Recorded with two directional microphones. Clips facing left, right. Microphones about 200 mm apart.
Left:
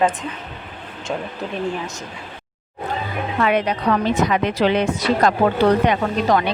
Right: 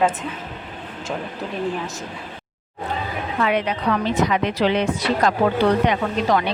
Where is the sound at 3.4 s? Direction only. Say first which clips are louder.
Left 2 dB; 45° left (ahead or behind).